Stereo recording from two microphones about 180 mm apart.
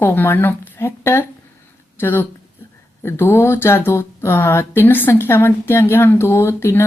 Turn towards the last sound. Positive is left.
turn(degrees=15)  # may be behind; listen again after turning